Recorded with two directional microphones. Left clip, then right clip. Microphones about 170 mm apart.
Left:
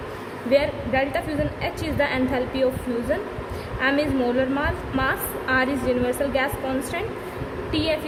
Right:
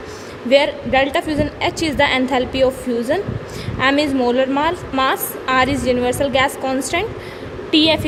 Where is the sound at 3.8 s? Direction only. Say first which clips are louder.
Right 6 dB; 45° right (ahead or behind).